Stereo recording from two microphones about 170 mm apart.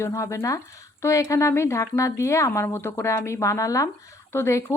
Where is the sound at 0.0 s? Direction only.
15° left (ahead or behind).